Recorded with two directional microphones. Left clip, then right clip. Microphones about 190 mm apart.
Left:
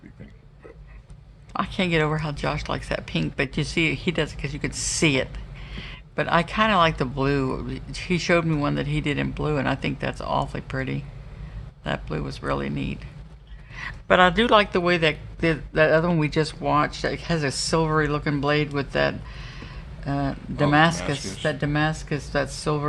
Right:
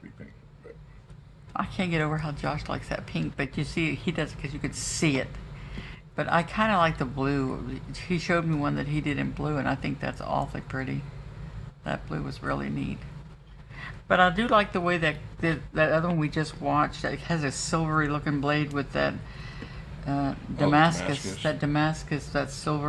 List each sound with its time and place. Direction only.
1.5 s speech: 35° left (ahead or behind)